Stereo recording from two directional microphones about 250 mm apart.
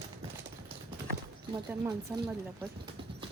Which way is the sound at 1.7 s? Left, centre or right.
Centre.